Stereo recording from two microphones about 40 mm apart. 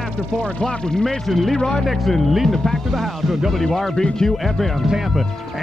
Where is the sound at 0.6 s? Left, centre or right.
Centre.